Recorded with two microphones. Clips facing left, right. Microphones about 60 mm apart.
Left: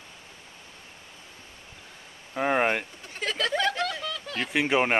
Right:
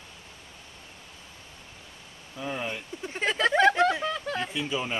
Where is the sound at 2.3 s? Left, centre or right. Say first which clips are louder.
Left 9 dB; left.